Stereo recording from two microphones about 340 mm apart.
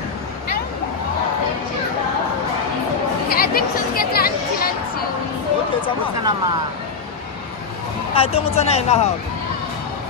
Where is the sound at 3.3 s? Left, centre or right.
Left.